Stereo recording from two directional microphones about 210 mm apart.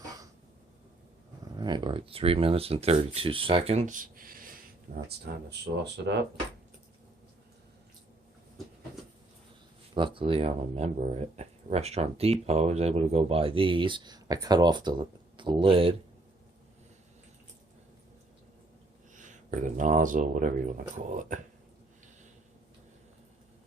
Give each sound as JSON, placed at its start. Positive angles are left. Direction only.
{"t": 1.5, "sound": "speech", "side_deg": -20}
{"t": 9.9, "sound": "speech", "side_deg": -25}
{"t": 19.1, "sound": "speech", "side_deg": -35}